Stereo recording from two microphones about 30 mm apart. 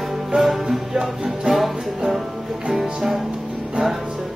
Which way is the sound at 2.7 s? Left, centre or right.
Centre.